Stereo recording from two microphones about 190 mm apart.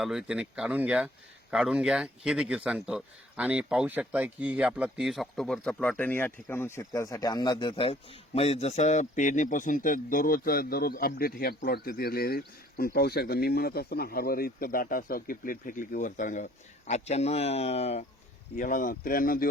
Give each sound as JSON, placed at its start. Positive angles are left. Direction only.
{"t": 0.0, "sound": "speech", "side_deg": -5}
{"t": 18.5, "sound": "speech", "side_deg": 45}